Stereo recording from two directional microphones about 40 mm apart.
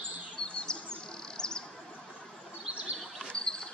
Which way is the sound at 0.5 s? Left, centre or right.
Centre.